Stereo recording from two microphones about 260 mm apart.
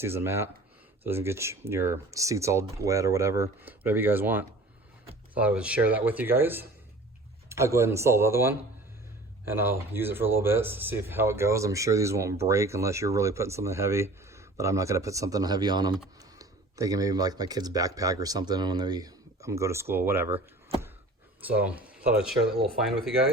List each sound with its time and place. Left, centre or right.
0.0 s speech: centre
21.4 s speech: centre